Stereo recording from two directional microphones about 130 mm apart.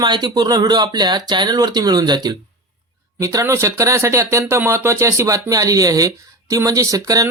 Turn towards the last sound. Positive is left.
turn(degrees=-25)  # may be behind; listen again after turning